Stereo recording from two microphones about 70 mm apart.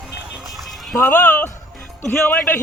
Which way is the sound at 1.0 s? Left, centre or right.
Left.